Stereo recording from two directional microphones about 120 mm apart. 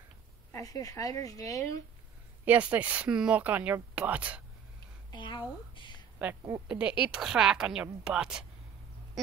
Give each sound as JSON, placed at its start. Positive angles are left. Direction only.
{"t": 0.5, "sound": "speech", "side_deg": 30}
{"t": 2.4, "sound": "speech", "side_deg": -10}
{"t": 5.1, "sound": "a sound", "side_deg": 40}
{"t": 6.7, "sound": "speech", "side_deg": -10}